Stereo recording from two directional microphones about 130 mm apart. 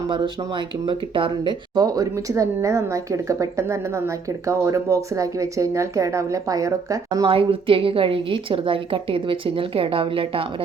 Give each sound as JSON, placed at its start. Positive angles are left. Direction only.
{"t": 0.1, "sound": "speech", "side_deg": -40}
{"t": 7.3, "sound": "a woman's voice", "side_deg": -45}